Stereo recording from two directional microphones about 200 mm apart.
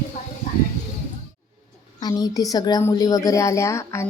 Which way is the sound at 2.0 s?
20° left (ahead or behind).